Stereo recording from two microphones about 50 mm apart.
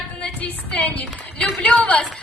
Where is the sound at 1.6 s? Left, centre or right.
Left.